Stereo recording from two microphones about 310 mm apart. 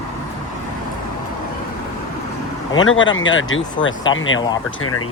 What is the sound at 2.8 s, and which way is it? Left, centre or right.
Speech, left.